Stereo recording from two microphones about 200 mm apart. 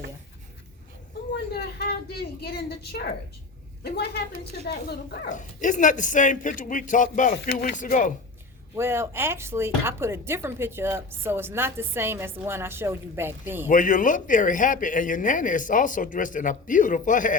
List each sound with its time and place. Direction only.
1.3 s vehicle: 55° left (ahead or behind)
2.4 s a woman's voice: 50° left (ahead or behind)
7.3 s speech: 60° left (ahead or behind)
7.8 s speech: 40° left (ahead or behind)
8.7 s speech: 10° right (ahead or behind)
13.7 s speech: 40° left (ahead or behind)